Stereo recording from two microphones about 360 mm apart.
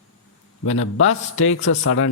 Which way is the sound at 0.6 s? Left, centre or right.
Left.